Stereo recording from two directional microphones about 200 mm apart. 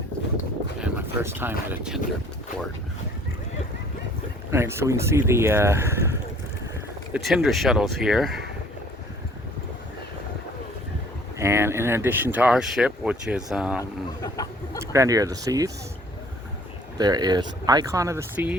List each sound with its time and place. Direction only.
0.8 s speech: 10° right (ahead or behind)
4.5 s speech: 15° right (ahead or behind)
7.1 s speech: centre (ahead or behind)
11.3 s speech: 15° right (ahead or behind)
13.7 s speech: 15° left (ahead or behind)
14.9 s speech: 15° right (ahead or behind)
17.0 s speech: 20° right (ahead or behind)